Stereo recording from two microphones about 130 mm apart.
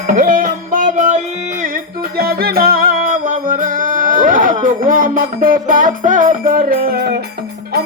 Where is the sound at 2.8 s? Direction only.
90° right.